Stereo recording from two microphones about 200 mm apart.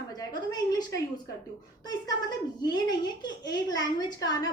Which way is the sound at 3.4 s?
20° left (ahead or behind).